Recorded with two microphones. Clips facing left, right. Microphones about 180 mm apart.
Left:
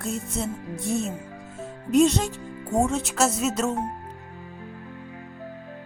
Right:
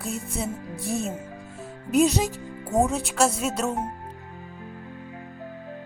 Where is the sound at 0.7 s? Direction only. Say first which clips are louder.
Left 5 dB; 35° right (ahead or behind).